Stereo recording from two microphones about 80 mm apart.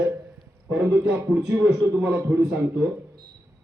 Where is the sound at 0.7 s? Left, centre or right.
Centre.